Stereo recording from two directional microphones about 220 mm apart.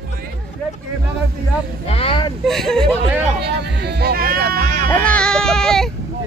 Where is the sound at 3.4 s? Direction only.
50° right (ahead or behind).